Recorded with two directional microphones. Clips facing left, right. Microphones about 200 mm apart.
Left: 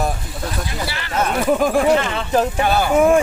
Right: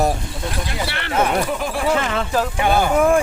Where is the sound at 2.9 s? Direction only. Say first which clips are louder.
Left 4 dB; 5° left (ahead or behind).